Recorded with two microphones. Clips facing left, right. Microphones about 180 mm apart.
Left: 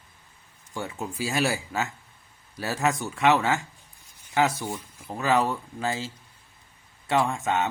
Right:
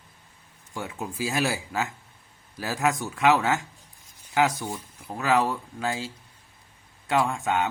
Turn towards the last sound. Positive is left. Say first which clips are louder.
# even
turn(degrees=0)  # may be behind; listen again after turning